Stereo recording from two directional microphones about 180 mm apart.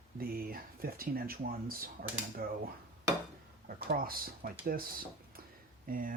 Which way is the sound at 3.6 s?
55° right (ahead or behind).